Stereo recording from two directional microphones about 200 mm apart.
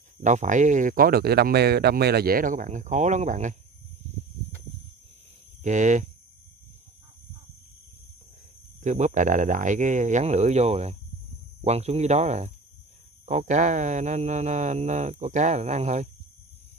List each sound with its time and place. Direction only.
0.2 s speech: 40° right (ahead or behind)
5.6 s speech: 40° right (ahead or behind)
8.8 s speech: 35° right (ahead or behind)